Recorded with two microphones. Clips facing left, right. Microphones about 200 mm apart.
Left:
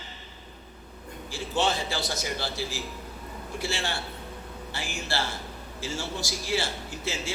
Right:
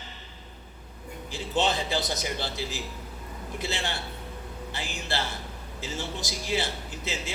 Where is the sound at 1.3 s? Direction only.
20° right (ahead or behind).